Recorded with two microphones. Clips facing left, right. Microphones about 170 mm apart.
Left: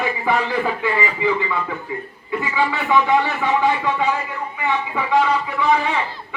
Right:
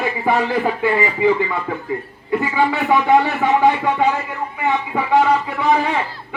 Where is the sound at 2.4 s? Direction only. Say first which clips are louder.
Right 2 dB; 45° right (ahead or behind).